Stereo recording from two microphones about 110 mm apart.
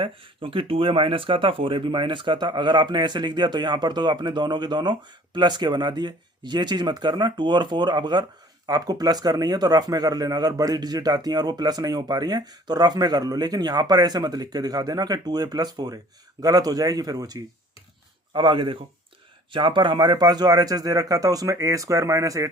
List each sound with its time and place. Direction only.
0.0 s speech: 55° right (ahead or behind); by 17.4 s 35° right (ahead or behind)
18.3 s speech: 50° right (ahead or behind); by 22.4 s 30° right (ahead or behind)